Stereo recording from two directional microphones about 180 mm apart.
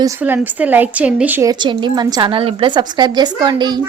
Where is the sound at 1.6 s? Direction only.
25° right (ahead or behind).